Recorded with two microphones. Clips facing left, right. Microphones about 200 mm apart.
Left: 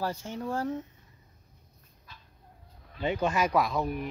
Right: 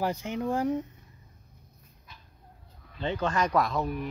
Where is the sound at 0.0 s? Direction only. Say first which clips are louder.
Right 4 dB; 15° right (ahead or behind).